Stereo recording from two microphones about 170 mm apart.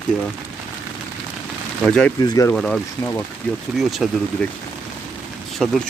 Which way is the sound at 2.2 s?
25° left (ahead or behind).